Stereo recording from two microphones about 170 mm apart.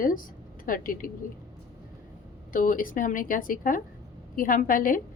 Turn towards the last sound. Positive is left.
turn(degrees=55)  # may be behind; listen again after turning